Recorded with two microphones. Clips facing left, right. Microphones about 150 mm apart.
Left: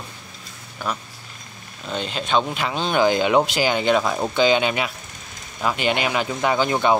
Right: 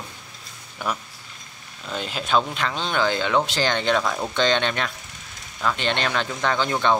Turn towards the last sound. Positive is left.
turn(degrees=10)  # may be behind; listen again after turning